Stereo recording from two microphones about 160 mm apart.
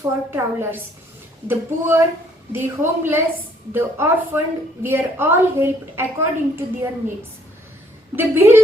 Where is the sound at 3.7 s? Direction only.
15° right (ahead or behind).